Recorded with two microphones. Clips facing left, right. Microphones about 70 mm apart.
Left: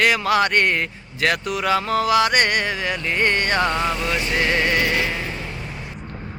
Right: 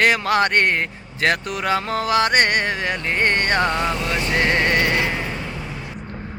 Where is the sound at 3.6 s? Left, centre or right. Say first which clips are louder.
Even; right.